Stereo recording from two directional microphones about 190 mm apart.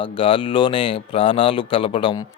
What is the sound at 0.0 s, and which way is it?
A man's voice, 25° left (ahead or behind).